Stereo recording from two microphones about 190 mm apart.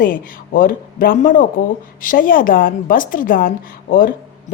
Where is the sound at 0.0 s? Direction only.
45° left (ahead or behind).